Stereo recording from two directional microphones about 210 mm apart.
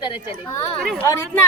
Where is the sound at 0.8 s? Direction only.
Centre (ahead or behind).